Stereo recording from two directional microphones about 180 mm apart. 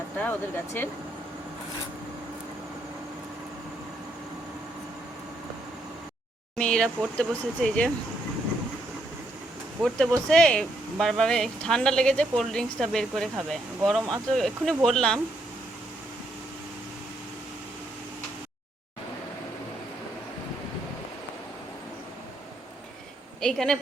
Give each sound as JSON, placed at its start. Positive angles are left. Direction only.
{"t": 0.2, "sound": "speech", "side_deg": 10}
{"t": 6.6, "sound": "speech", "side_deg": 5}
{"t": 9.8, "sound": "speech", "side_deg": 5}
{"t": 23.4, "sound": "speech", "side_deg": 5}